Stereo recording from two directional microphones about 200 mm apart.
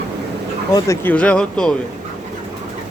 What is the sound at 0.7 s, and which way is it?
Speech, 10° left (ahead or behind).